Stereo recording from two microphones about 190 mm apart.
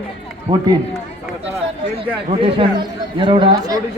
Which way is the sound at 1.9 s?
30° right (ahead or behind).